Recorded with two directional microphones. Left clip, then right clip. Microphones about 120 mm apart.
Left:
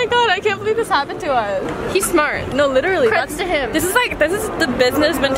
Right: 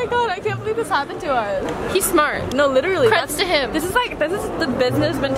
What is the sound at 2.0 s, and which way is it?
Speech, 5° right (ahead or behind).